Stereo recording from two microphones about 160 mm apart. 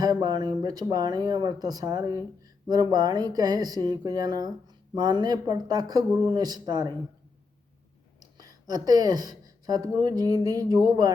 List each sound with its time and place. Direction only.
0.0 s speech: 25° right (ahead or behind)
8.2 s speech: 25° right (ahead or behind)